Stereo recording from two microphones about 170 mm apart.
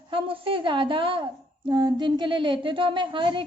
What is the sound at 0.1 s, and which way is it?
A woman's voice, 30° right (ahead or behind).